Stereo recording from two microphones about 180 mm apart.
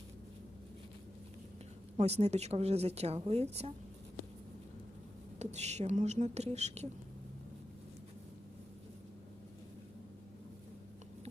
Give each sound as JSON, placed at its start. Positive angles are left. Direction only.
{"t": 2.0, "sound": "a woman's voice", "side_deg": -35}
{"t": 5.4, "sound": "a woman's voice", "side_deg": -40}